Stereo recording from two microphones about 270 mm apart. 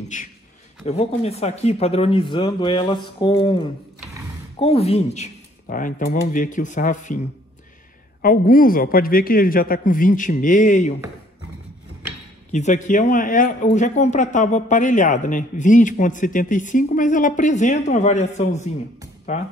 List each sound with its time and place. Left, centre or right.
0.1 s a man's voice: left
8.2 s a man's voice: left
12.5 s a man's voice: left